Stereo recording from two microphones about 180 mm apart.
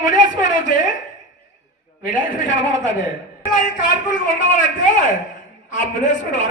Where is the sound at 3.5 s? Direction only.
45° left (ahead or behind).